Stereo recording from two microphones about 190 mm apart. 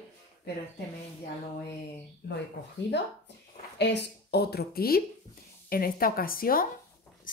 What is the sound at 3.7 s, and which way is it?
A woman's voice, 65° left (ahead or behind).